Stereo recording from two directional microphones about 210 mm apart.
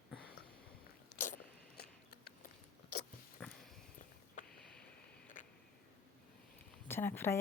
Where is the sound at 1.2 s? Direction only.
45° left (ahead or behind).